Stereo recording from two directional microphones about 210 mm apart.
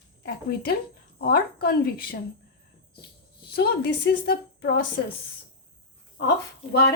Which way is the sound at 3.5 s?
50° left (ahead or behind).